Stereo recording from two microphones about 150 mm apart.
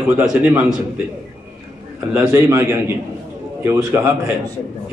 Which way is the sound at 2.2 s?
20° right (ahead or behind).